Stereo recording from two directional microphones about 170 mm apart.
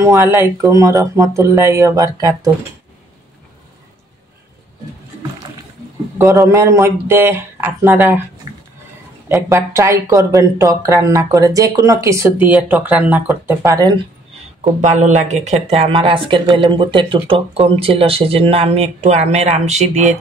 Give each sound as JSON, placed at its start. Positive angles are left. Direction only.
{"t": 0.0, "sound": "speech", "side_deg": -20}
{"t": 6.1, "sound": "speech", "side_deg": -20}
{"t": 9.3, "sound": "speech", "side_deg": -15}
{"t": 14.6, "sound": "speech", "side_deg": -45}